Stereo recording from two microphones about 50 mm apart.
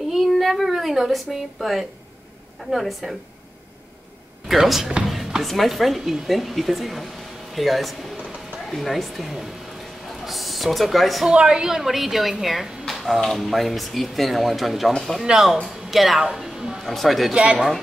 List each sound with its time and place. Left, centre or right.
0.1 s a woman's voice: centre
4.5 s speech: centre
11.2 s a woman's voice: centre
11.7 s speech: centre
15.2 s speech: centre
17.3 s speech: right